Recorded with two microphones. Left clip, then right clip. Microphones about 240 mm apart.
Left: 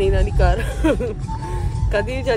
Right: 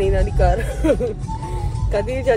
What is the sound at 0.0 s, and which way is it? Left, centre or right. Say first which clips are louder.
Speech: right 1 dB; centre.